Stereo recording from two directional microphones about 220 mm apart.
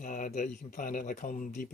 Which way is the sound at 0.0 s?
35° left (ahead or behind).